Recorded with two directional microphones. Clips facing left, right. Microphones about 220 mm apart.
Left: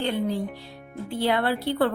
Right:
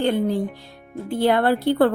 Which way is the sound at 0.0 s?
50° right (ahead or behind).